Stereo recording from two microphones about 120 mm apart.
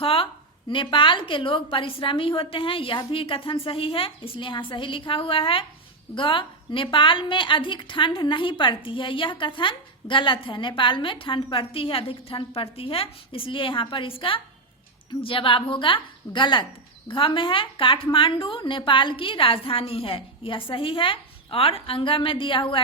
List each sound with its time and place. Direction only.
0.0 s a woman's voice: 50° left (ahead or behind)